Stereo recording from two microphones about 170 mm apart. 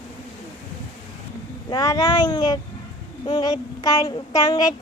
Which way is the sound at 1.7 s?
20° left (ahead or behind).